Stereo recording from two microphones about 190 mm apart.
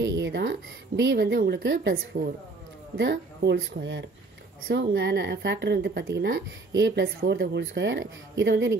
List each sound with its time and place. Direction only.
0.0 s a woman's voice: 65° right (ahead or behind)